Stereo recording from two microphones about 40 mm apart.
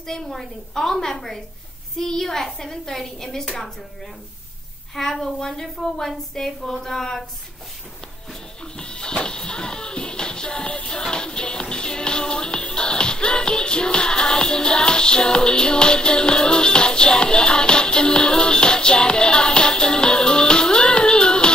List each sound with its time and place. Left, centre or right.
0.0 s a woman's voice: centre
4.9 s a woman's voice: centre
8.7 s music: left